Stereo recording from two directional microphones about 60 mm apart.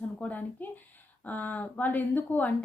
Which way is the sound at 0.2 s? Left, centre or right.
Left.